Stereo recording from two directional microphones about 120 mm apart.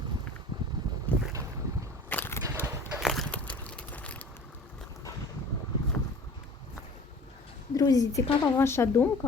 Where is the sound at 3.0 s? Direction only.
Centre (ahead or behind).